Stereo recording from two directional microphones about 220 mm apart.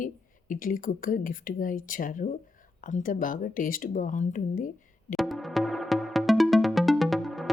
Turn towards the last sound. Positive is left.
turn(degrees=0)  # may be behind; listen again after turning